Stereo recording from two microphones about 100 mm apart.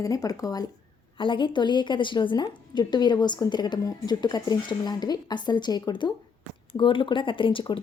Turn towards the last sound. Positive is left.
turn(degrees=55)  # may be behind; listen again after turning